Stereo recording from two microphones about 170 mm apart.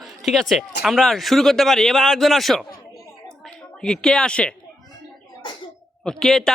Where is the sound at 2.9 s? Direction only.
5° left (ahead or behind).